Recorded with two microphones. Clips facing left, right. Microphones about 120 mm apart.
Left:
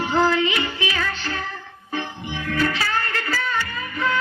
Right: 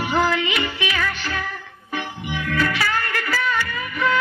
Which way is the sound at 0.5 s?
20° left (ahead or behind).